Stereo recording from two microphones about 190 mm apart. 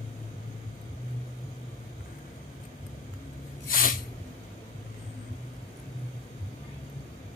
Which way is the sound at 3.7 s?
50° left (ahead or behind).